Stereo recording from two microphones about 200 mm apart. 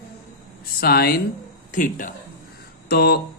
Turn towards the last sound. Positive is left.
turn(degrees=50)  # may be behind; listen again after turning